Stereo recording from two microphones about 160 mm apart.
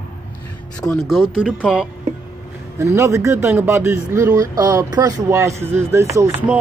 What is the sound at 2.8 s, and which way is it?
Speech, 20° right (ahead or behind).